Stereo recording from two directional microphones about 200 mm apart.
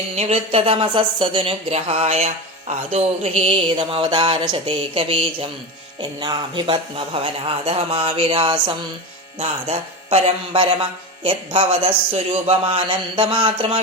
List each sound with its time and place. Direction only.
0.2 s speech: 30° right (ahead or behind)